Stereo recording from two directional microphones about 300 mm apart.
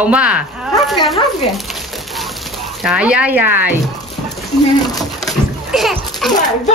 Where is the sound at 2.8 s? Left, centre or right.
Centre.